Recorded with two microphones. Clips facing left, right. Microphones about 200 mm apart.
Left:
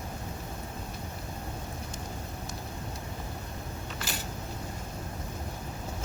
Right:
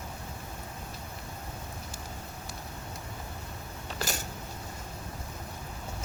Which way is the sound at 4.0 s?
45° right (ahead or behind).